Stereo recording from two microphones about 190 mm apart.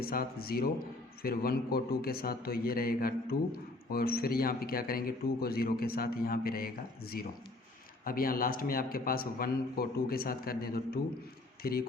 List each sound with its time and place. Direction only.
0.0 s a man's voice: 50° left (ahead or behind)